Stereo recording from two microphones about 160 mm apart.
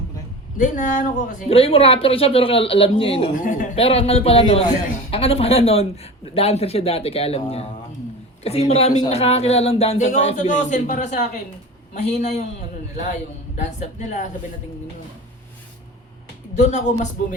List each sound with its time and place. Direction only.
0.6 s speech: 55° left (ahead or behind)
1.5 s speech: 35° left (ahead or behind)
3.3 s speech: 55° left (ahead or behind)
3.8 s speech: 35° left (ahead or behind)
10.1 s a man's voice: 50° left (ahead or behind)
13.6 s a man's voice: 50° left (ahead or behind)
16.6 s a man's voice: 50° left (ahead or behind)